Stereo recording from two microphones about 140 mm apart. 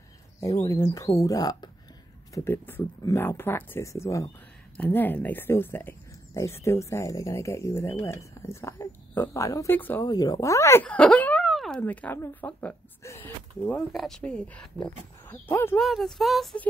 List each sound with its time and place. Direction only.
0.4 s speech: 25° left (ahead or behind)
2.3 s speech: 15° left (ahead or behind)
10.0 s speech: 30° left (ahead or behind); by 11.4 s 10° left (ahead or behind)
11.4 s a sound: centre (ahead or behind)
11.8 s speech: 10° left (ahead or behind)
13.0 s a sound: 15° left (ahead or behind)
13.7 s speech: centre (ahead or behind)
15.8 s speech: centre (ahead or behind)